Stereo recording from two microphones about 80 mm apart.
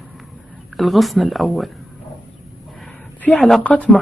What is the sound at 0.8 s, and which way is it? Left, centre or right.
Speech, centre.